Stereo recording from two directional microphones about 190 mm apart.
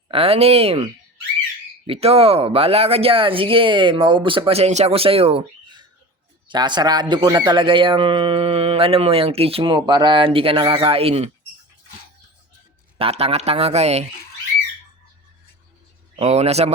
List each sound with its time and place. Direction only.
0.1 s speech: 30° right (ahead or behind)
1.9 s speech: 30° right (ahead or behind)
13.0 s speech: 30° right (ahead or behind)
16.1 s speech: 35° right (ahead or behind)